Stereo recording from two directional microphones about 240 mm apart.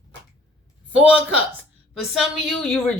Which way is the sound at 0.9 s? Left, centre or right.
Centre.